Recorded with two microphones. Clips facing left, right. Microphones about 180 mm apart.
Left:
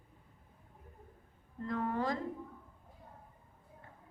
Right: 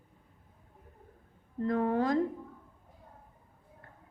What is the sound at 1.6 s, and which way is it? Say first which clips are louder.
Speech: right 6 dB; 60° right (ahead or behind).